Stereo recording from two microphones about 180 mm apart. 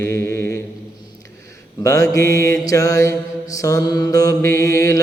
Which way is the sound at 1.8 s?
20° left (ahead or behind).